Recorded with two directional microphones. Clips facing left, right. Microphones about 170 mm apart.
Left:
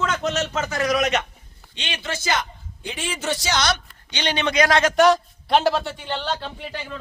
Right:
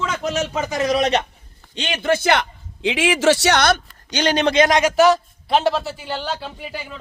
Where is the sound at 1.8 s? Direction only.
45° right (ahead or behind).